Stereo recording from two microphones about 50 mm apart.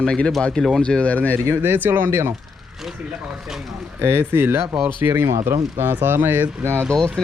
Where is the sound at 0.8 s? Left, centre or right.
Left.